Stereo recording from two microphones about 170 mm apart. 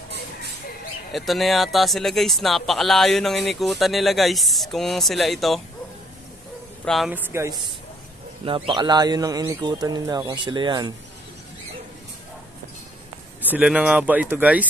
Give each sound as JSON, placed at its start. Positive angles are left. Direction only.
{"t": 1.1, "sound": "speech", "side_deg": 0}
{"t": 6.8, "sound": "speech", "side_deg": 0}
{"t": 7.2, "sound": "speech", "side_deg": -15}
{"t": 8.5, "sound": "speech", "side_deg": -30}
{"t": 13.4, "sound": "speech", "side_deg": -10}